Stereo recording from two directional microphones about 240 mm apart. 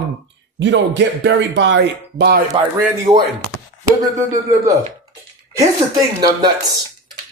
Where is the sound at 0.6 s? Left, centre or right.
Right.